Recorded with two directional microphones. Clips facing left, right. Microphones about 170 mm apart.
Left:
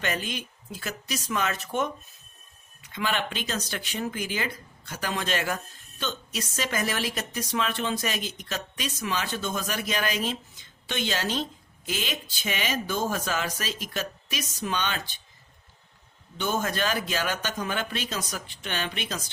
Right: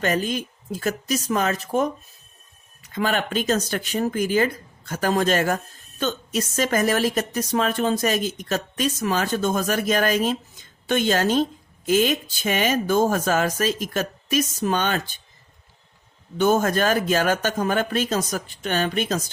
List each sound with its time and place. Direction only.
0.0 s a woman's voice: 40° right (ahead or behind)
2.9 s a woman's voice: 45° right (ahead or behind)
16.4 s a woman's voice: 45° right (ahead or behind)